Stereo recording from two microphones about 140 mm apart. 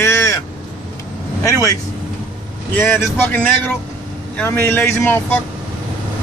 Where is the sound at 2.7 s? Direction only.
15° left (ahead or behind).